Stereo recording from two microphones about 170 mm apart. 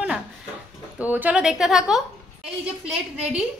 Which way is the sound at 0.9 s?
10° right (ahead or behind).